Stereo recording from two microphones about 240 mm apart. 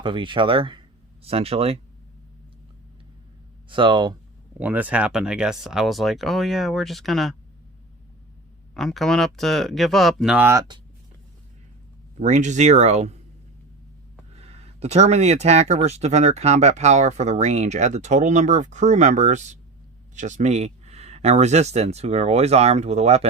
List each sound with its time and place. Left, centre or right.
0.0 s speech: centre
3.7 s speech: centre
4.6 s speech: centre
8.7 s speech: centre
12.2 s speech: right
14.3 s speech: right